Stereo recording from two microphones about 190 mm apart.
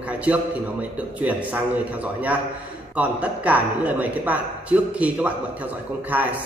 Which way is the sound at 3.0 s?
10° right (ahead or behind).